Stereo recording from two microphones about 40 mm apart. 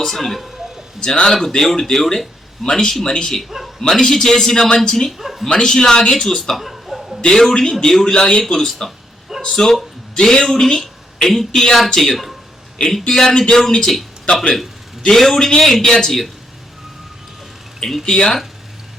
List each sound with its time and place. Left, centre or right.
0.0 s speech: centre
1.0 s speech: centre
1.3 s a man's voice: centre
5.1 s speech: centre
5.5 s a man's voice: centre
6.6 s chuckle: centre
7.3 s a man's voice: centre
15.1 s a man's voice: centre
18.0 s speech: centre